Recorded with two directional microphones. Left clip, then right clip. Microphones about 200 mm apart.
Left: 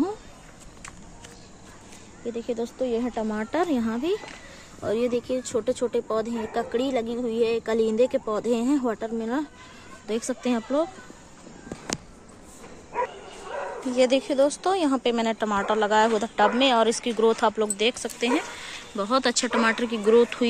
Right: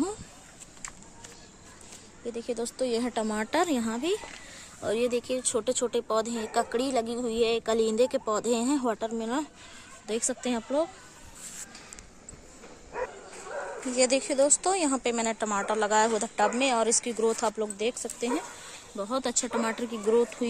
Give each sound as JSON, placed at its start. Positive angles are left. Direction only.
{"t": 2.3, "sound": "speech", "side_deg": -5}
{"t": 2.8, "sound": "a woman's voice", "side_deg": -25}
{"t": 12.9, "sound": "bow-wow", "side_deg": -45}
{"t": 13.9, "sound": "a woman's voice", "side_deg": -5}